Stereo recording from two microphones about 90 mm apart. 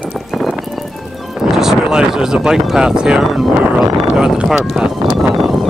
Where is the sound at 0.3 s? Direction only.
Centre (ahead or behind).